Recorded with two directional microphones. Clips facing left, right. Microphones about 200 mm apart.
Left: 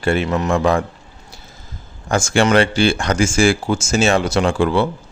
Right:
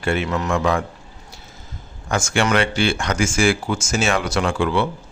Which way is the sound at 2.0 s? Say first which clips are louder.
Left 4 dB; 30° left (ahead or behind).